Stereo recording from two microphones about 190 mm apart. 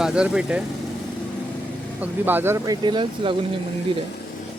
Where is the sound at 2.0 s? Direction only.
10° right (ahead or behind); by 3.4 s 25° right (ahead or behind).